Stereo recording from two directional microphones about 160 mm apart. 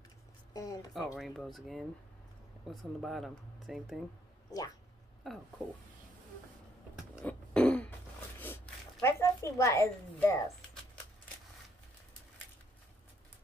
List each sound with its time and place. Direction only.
0.5 s speech: 25° left (ahead or behind)
0.9 s speech: centre (ahead or behind)
5.2 s speech: centre (ahead or behind)
7.2 s throat clearing: 10° left (ahead or behind)
9.0 s a woman's voice: 15° left (ahead or behind)